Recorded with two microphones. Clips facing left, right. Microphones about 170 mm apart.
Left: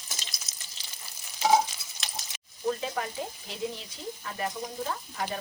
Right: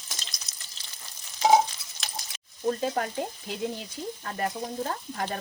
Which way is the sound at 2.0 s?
Centre (ahead or behind).